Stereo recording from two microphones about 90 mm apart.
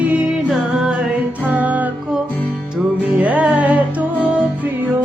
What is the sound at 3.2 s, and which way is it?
Music, 15° right (ahead or behind).